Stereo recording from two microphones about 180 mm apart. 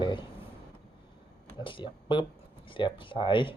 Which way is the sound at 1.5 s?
25° left (ahead or behind).